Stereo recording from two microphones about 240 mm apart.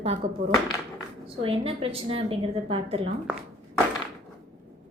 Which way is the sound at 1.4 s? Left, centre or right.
Right.